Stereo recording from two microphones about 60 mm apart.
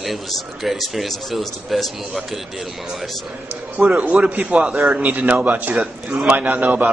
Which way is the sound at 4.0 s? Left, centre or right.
Right.